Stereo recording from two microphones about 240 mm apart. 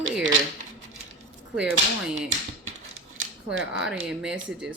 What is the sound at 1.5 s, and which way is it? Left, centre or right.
Speech, centre.